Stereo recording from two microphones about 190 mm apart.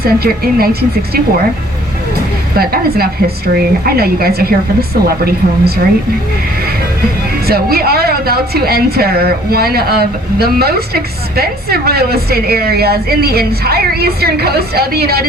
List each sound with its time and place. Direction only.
0.0 s a woman's voice: 55° right (ahead or behind)
2.6 s a woman's voice: 55° right (ahead or behind)
7.4 s a woman's voice: 55° right (ahead or behind)